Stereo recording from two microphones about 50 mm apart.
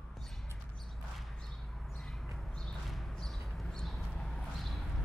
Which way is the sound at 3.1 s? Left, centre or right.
Centre.